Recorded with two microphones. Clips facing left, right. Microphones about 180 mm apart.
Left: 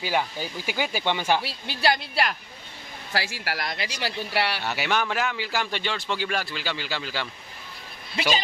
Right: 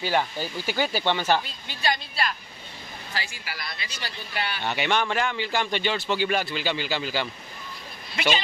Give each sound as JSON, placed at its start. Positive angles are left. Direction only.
{"t": 0.0, "sound": "speech", "side_deg": 10}
{"t": 1.4, "sound": "a woman's voice", "side_deg": 75}
{"t": 4.0, "sound": "a woman's voice", "side_deg": 75}
{"t": 4.6, "sound": "speech", "side_deg": 5}